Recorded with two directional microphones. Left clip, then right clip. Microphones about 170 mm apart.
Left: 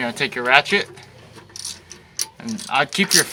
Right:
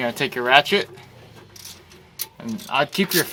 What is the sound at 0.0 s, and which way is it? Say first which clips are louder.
Speech: left 1 dB; 25° right (ahead or behind).